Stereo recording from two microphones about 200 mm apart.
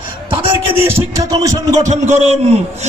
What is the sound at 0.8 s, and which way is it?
Music, 15° right (ahead or behind).